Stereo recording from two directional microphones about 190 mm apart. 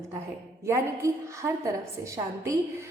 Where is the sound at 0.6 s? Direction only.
15° right (ahead or behind).